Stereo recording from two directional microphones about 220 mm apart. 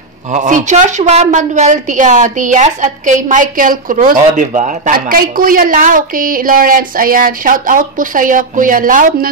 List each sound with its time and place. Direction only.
0.3 s a woman's voice: 35° right (ahead or behind)